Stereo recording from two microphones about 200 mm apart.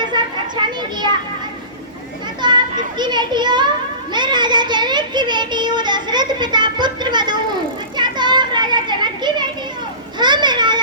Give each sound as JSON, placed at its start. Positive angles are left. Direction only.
{"t": 0.1, "sound": "a sound", "side_deg": -20}
{"t": 2.4, "sound": "children playing", "side_deg": -20}
{"t": 3.0, "sound": "a child's voice", "side_deg": -20}
{"t": 4.1, "sound": "child singing", "side_deg": -20}
{"t": 7.9, "sound": "children playing", "side_deg": -20}
{"t": 10.2, "sound": "a sound", "side_deg": -20}